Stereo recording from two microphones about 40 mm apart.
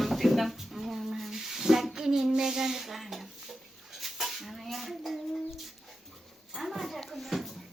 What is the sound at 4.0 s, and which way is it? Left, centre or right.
Dishes, centre.